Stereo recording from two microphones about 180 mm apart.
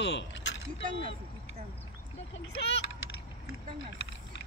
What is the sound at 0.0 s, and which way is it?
Speech, 70° left (ahead or behind).